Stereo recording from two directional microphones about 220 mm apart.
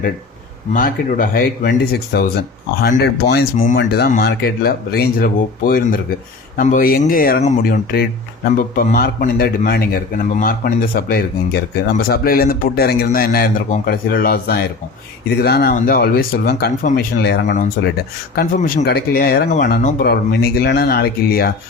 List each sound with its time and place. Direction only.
0.7 s a man's voice: 40° left (ahead or behind)